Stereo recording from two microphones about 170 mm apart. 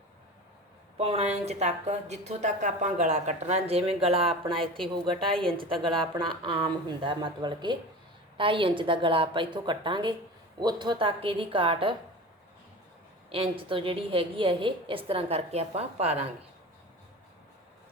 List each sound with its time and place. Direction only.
0.9 s a woman's voice: 35° right (ahead or behind)
5.3 s a woman's voice: 5° left (ahead or behind)
6.1 s a woman's voice: 30° right (ahead or behind)
13.3 s a woman's voice: 30° right (ahead or behind)